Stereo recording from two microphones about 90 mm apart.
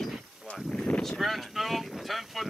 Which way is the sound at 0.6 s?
Centre (ahead or behind).